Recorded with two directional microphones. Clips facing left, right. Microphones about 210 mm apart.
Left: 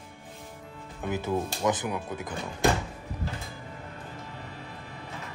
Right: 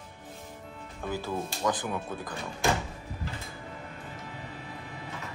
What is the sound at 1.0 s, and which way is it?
Speech, 20° left (ahead or behind).